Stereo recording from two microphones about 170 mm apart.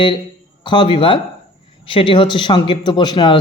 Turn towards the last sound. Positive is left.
turn(degrees=30)  # may be behind; listen again after turning